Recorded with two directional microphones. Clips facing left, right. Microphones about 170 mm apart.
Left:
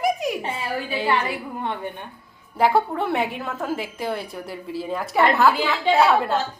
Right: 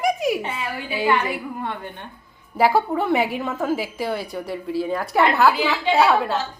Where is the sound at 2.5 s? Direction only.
5° right (ahead or behind).